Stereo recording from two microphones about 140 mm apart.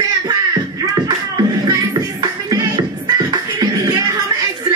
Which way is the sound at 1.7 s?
25° right (ahead or behind).